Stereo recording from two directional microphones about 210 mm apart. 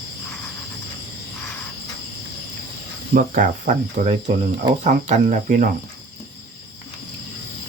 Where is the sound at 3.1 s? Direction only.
40° right (ahead or behind).